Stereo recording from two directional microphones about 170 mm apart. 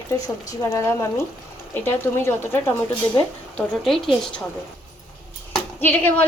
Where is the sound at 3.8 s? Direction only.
Centre (ahead or behind).